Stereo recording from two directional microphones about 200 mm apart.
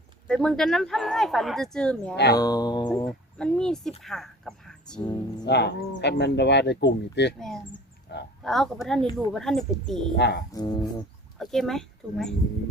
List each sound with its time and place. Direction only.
0.3 s speech: 5° left (ahead or behind)
2.3 s music: 20° left (ahead or behind)
3.1 s speech: 5° left (ahead or behind)
4.9 s music: 20° left (ahead or behind)
5.5 s speech: 55° left (ahead or behind)
7.3 s speech: centre (ahead or behind)
8.1 s speech: 55° left (ahead or behind)
8.4 s speech: centre (ahead or behind)
10.2 s speech: 55° left (ahead or behind)
10.5 s music: 20° left (ahead or behind)
11.3 s speech: centre (ahead or behind)